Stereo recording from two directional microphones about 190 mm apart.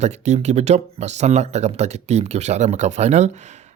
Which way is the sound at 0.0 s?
35° right (ahead or behind).